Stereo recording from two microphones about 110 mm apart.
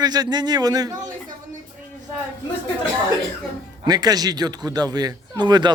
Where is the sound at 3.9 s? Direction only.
35° right (ahead or behind).